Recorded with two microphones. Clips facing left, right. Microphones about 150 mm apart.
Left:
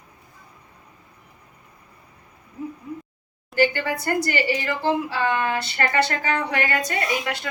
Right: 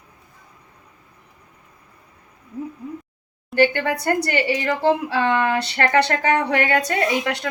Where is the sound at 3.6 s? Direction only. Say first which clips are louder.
Right 3 dB; 65° right (ahead or behind).